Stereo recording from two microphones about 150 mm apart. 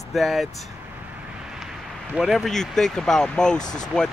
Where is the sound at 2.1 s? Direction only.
5° right (ahead or behind).